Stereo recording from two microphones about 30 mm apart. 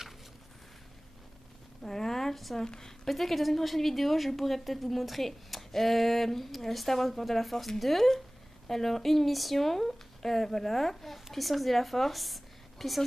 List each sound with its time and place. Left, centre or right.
1.8 s a sound: centre
2.5 s a woman's voice: left
3.1 s a woman's voice: centre